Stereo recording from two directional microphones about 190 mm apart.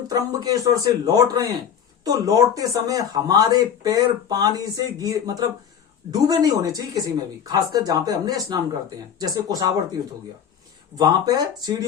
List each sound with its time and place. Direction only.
0.1 s speech: 20° right (ahead or behind)
10.9 s speech: 20° right (ahead or behind)